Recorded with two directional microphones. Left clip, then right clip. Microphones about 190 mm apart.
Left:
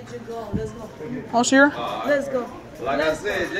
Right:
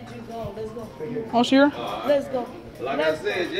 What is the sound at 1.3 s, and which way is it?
Speech, 20° right (ahead or behind).